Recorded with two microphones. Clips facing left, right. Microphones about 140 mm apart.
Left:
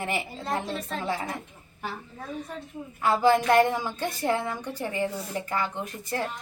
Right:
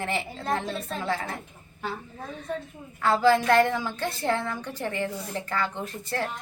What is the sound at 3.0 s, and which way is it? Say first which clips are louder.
A woman's voice: even; 15° left (ahead or behind).